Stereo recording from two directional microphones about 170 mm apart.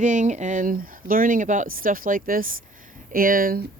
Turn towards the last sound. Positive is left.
turn(degrees=-55)  # may be behind; listen again after turning